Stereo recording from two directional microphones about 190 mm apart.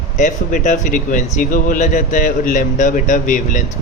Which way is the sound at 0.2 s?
40° left (ahead or behind).